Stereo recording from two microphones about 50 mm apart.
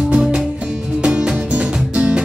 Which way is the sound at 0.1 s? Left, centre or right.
Centre.